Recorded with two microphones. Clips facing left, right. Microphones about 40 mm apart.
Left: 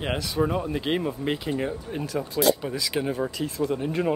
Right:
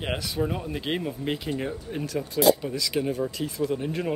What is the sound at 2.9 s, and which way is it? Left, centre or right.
Speech, centre.